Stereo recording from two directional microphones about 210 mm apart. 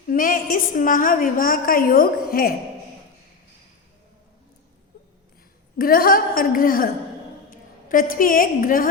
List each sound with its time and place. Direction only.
0.1 s a woman's voice: 40° left (ahead or behind)
5.7 s a woman's voice: 45° left (ahead or behind)